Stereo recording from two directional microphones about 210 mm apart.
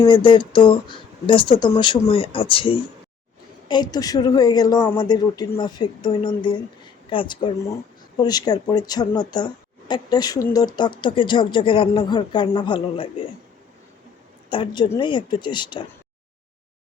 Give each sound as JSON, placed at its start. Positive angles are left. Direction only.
{"t": 0.0, "sound": "a woman's voice", "side_deg": 20}
{"t": 14.5, "sound": "a woman's voice", "side_deg": 20}